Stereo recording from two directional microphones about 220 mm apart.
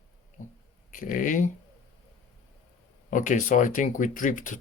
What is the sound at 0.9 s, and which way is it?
Speech, 35° left (ahead or behind).